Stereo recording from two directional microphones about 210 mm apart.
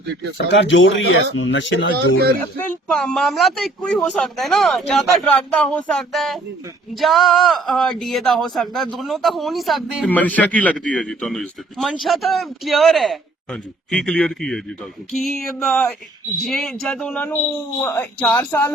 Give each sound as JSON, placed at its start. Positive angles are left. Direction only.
{"t": 0.5, "sound": "speech", "side_deg": 65}
{"t": 2.4, "sound": "a woman's voice", "side_deg": 10}